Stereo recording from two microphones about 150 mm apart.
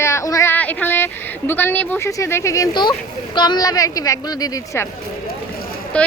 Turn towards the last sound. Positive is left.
turn(degrees=5)  # may be behind; listen again after turning